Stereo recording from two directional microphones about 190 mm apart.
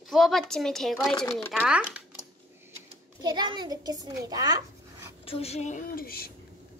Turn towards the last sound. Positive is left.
turn(degrees=50)  # may be behind; listen again after turning